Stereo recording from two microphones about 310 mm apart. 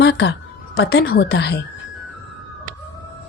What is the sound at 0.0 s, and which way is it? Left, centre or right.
A woman's voice, left.